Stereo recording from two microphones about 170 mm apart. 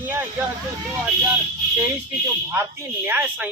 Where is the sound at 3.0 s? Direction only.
10° right (ahead or behind).